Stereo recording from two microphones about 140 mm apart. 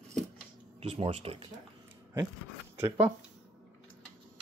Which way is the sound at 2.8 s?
10° right (ahead or behind).